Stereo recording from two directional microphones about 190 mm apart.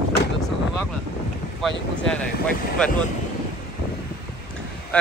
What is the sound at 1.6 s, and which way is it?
Speech, centre (ahead or behind).